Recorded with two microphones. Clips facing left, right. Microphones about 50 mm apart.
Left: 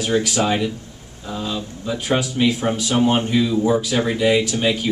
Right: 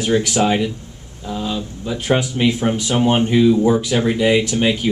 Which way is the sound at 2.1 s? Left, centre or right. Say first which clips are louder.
Right 2 dB; right.